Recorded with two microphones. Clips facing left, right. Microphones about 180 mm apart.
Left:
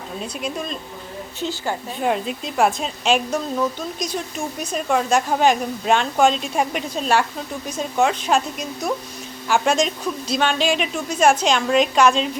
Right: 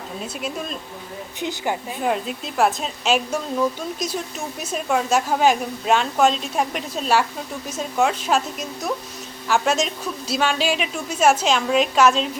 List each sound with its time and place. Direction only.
0.4 s a man's voice: 5° right (ahead or behind)
1.4 s a woman's voice: 15° right (ahead or behind)
2.0 s a man's voice: centre (ahead or behind)
4.6 s a man's voice: 5° right (ahead or behind)